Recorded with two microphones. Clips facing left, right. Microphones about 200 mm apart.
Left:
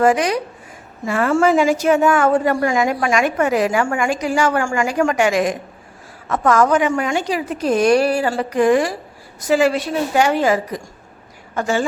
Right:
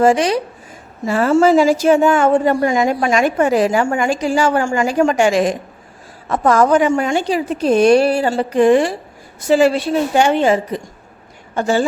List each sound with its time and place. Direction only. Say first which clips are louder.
0.0 s a woman's voice: right 2 dB; 25° right (ahead or behind)